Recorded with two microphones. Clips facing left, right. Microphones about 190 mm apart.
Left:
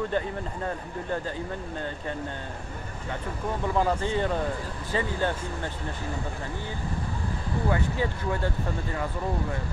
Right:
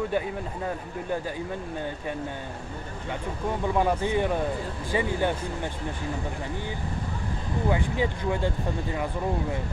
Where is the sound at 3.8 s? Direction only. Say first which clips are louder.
Right 1 dB; 15° right (ahead or behind).